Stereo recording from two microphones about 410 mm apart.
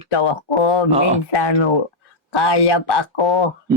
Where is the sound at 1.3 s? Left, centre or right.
Left.